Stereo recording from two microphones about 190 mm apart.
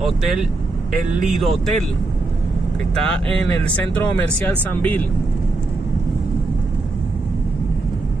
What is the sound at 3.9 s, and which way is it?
Speech, 10° left (ahead or behind).